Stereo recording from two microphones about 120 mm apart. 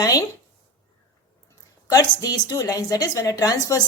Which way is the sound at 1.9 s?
30° left (ahead or behind).